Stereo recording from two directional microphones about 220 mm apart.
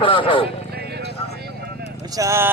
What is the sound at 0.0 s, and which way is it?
Speech, 25° left (ahead or behind).